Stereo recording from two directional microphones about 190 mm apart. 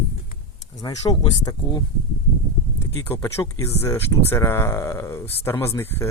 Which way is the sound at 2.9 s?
15° left (ahead or behind).